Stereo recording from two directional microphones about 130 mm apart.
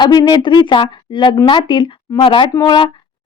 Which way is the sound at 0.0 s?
35° left (ahead or behind).